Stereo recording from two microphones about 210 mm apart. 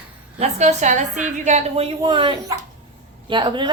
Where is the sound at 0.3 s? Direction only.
30° right (ahead or behind).